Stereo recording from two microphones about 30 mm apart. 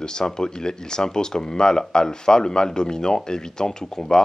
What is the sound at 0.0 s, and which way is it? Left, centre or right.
Speech, left.